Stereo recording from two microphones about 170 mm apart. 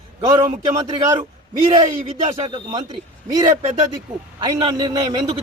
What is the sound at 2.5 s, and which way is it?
A man's voice, 25° right (ahead or behind).